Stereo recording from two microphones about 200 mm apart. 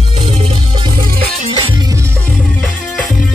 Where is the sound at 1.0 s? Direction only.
30° right (ahead or behind).